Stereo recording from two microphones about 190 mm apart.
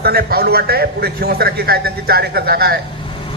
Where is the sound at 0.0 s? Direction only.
55° right (ahead or behind).